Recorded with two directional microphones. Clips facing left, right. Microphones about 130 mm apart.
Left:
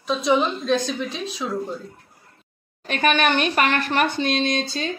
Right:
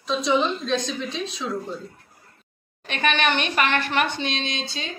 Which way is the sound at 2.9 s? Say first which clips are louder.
Left 3 dB; 40° left (ahead or behind).